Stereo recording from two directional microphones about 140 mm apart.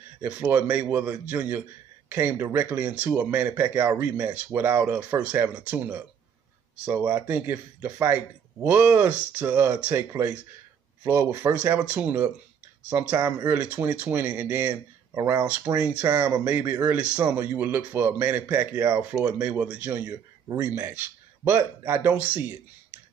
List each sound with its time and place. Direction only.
0.2 s speech: 15° right (ahead or behind)
15.1 s speech: 20° right (ahead or behind)
15.4 s speech: 10° right (ahead or behind)